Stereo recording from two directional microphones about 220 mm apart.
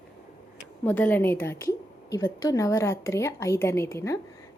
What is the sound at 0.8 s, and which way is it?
A woman's voice, 10° left (ahead or behind).